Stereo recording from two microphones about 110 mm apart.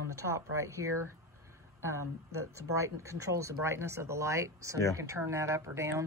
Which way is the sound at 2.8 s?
25° right (ahead or behind).